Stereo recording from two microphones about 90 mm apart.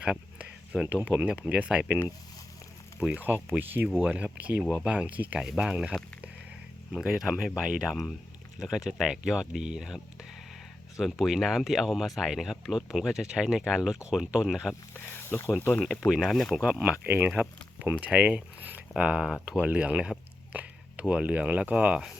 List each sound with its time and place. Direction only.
0.0 s speech: 10° right (ahead or behind)
3.0 s speech: 15° right (ahead or behind)
11.0 s speech: 5° right (ahead or behind)
14.9 s speech: 25° left (ahead or behind)
16.0 s speech: 10° right (ahead or behind)
16.8 s speech: 15° right (ahead or behind)